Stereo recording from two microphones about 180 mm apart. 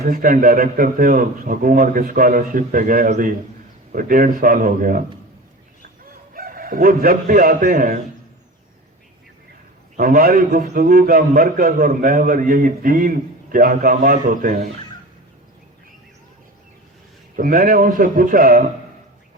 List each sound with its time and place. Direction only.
0.0 s a man's voice: 50° right (ahead or behind)
6.3 s a man's voice: 50° right (ahead or behind)
10.0 s a man's voice: 55° right (ahead or behind)
17.3 s a man's voice: 50° right (ahead or behind)